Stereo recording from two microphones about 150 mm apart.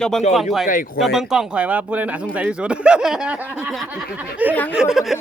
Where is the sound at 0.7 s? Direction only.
65° left (ahead or behind).